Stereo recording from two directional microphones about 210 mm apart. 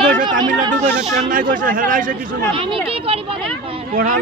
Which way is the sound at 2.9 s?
25° right (ahead or behind).